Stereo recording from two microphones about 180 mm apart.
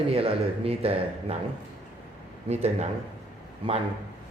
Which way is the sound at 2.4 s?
40° right (ahead or behind).